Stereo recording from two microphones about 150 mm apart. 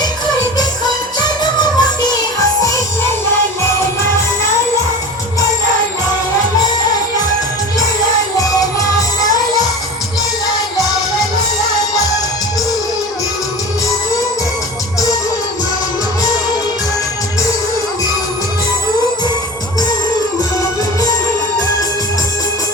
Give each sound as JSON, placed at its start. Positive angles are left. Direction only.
{"t": 0.9, "sound": "music", "side_deg": 30}
{"t": 8.4, "sound": "music", "side_deg": 25}